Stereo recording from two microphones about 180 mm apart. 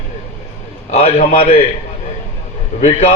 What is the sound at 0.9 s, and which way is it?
Speech, 35° left (ahead or behind).